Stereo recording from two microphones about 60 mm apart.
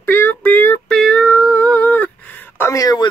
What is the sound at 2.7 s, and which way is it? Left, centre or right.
Speech, left.